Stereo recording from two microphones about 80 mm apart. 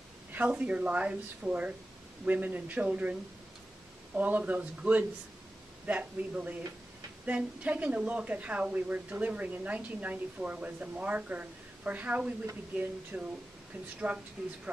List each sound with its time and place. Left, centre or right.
0.3 s a woman's voice: centre